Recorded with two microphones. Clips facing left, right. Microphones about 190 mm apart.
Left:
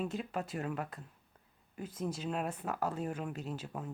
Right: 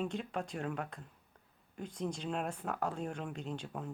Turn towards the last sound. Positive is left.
turn(degrees=5)  # may be behind; listen again after turning